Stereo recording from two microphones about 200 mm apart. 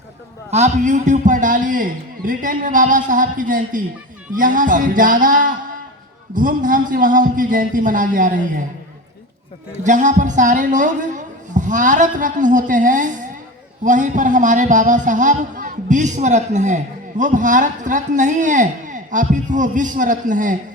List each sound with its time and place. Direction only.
0.5 s a man's voice: 35° right (ahead or behind)
9.8 s a man's voice: 40° right (ahead or behind)